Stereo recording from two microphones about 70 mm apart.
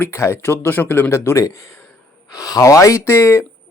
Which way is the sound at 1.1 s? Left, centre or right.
Left.